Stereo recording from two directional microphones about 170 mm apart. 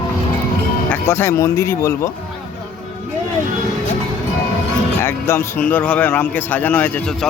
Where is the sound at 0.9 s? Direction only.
15° left (ahead or behind).